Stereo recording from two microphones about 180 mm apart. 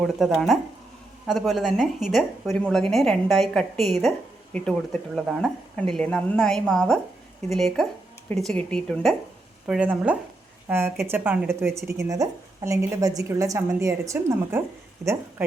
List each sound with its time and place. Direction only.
0.0 s a woman's voice: centre (ahead or behind)